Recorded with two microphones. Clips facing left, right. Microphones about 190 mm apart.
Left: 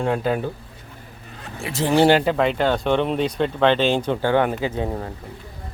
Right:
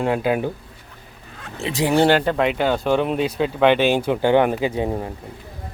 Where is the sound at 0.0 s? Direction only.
5° right (ahead or behind).